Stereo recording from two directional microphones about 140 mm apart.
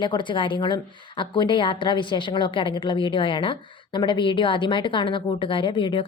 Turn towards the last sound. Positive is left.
turn(degrees=35)  # may be behind; listen again after turning